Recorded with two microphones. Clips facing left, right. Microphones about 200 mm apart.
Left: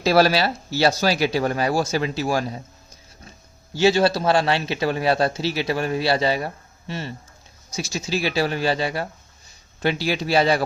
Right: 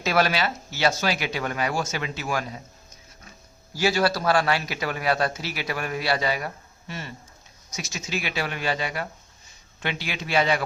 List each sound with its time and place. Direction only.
0.0 s a man's voice: 35° left (ahead or behind)